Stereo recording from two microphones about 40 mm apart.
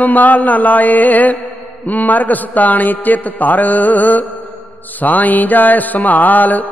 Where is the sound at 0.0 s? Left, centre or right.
Left.